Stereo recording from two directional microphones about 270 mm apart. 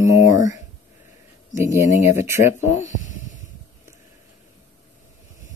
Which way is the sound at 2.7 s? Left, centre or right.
Left.